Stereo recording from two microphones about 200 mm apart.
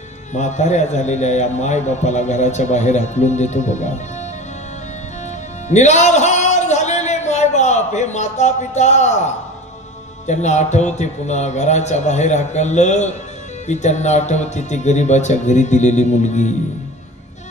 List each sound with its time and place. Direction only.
0.3 s a man's voice: 35° left (ahead or behind)
5.7 s a man's voice: 35° left (ahead or behind)